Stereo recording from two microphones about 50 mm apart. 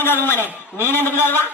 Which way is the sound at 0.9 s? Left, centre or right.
Left.